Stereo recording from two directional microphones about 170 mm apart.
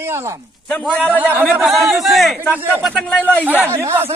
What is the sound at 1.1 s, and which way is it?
A man's voice, 10° right (ahead or behind).